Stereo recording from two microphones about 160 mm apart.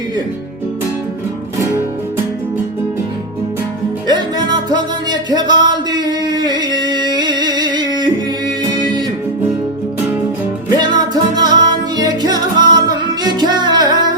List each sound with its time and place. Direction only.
4.0 s music: 25° right (ahead or behind)
10.8 s music: 25° right (ahead or behind)